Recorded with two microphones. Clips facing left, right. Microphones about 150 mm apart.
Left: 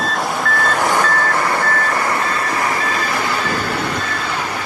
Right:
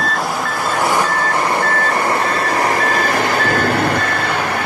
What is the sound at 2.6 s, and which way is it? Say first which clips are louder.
Vehicle: right 4 dB; 60° right (ahead or behind).